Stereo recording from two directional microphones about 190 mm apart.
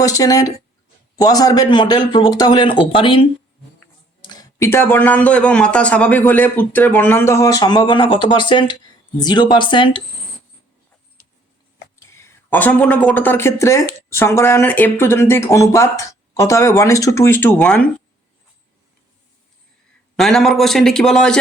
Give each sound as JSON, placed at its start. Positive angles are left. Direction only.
{"t": 0.0, "sound": "speech", "side_deg": 20}
{"t": 11.9, "sound": "speech", "side_deg": 15}
{"t": 20.1, "sound": "a man's voice", "side_deg": 0}